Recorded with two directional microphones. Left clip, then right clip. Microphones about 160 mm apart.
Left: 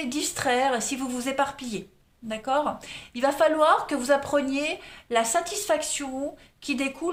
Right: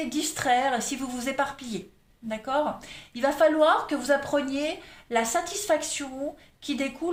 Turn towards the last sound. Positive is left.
turn(degrees=40)  # may be behind; listen again after turning